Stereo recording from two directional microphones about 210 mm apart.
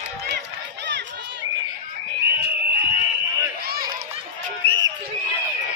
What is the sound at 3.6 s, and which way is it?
Run, 45° right (ahead or behind).